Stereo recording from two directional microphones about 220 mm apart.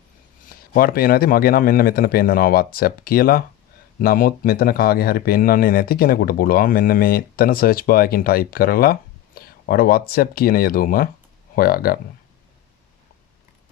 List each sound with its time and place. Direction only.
0.4 s a man's voice: 40° left (ahead or behind)